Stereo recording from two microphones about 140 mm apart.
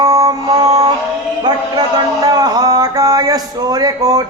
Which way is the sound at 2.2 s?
25° right (ahead or behind).